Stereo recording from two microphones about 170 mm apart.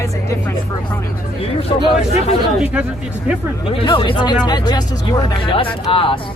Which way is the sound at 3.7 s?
30° left (ahead or behind).